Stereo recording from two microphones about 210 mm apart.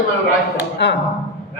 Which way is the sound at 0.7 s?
55° left (ahead or behind).